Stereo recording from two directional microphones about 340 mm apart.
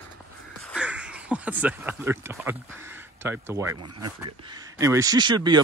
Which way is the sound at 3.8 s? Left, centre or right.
Right.